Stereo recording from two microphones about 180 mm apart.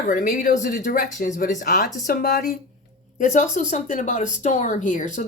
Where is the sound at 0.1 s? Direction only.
50° left (ahead or behind).